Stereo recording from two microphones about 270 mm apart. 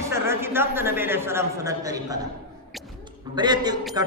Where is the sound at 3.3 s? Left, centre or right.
Centre.